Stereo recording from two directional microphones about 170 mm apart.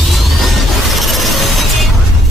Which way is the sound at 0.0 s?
Centre (ahead or behind).